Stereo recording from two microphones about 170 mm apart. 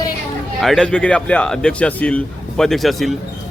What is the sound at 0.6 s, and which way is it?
Speech, centre (ahead or behind).